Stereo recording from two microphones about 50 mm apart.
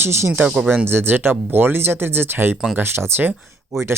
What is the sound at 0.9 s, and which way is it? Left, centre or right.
Speech, right.